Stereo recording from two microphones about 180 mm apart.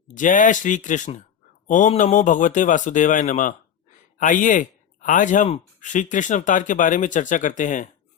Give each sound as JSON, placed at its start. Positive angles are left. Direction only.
{"t": 0.1, "sound": "speech", "side_deg": 45}